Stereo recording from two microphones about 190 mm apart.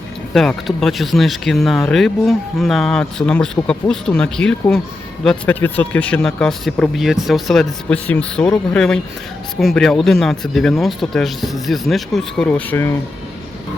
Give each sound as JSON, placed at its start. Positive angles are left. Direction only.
{"t": 0.3, "sound": "speech", "side_deg": 0}